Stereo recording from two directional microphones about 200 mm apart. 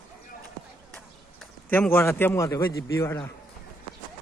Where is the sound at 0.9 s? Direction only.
5° left (ahead or behind).